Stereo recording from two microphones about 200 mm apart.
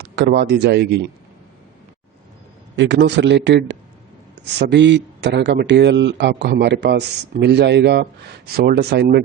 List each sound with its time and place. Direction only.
0.0 s speech: 55° right (ahead or behind)
2.7 s speech: 65° right (ahead or behind)